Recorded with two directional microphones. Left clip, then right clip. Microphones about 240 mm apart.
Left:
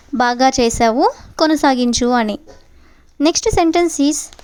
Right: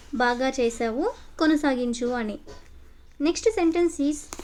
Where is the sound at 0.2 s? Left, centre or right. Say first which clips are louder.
Left 9 dB; left.